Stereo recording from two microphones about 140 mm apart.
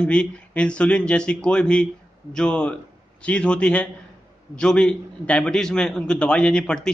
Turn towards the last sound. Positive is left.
turn(degrees=5)  # may be behind; listen again after turning